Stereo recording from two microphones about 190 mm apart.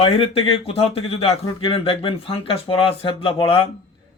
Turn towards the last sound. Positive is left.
turn(degrees=25)  # may be behind; listen again after turning